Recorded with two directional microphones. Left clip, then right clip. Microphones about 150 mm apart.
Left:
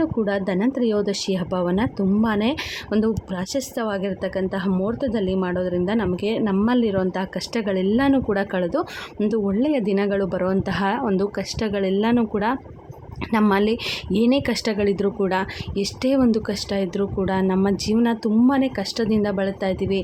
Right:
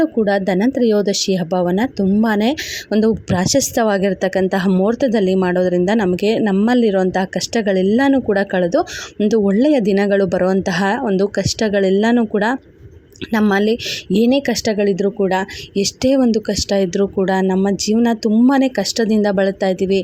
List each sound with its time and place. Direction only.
0.0 s speech: 35° right (ahead or behind)